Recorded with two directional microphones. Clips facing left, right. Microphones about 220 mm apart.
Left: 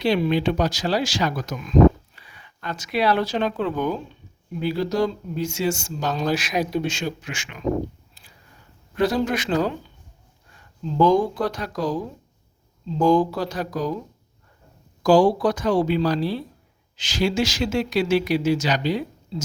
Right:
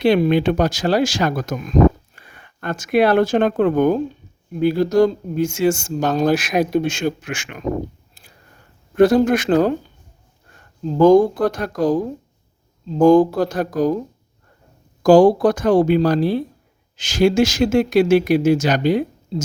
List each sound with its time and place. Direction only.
0.0 s speech: 55° right (ahead or behind)
8.1 s a sound: 50° right (ahead or behind)
9.0 s speech: 50° right (ahead or behind)
15.0 s speech: 50° right (ahead or behind)